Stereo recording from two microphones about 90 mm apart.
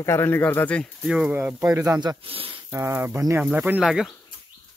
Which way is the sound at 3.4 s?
15° right (ahead or behind).